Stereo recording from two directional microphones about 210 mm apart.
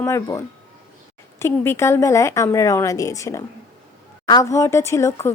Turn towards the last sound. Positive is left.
turn(degrees=15)  # may be behind; listen again after turning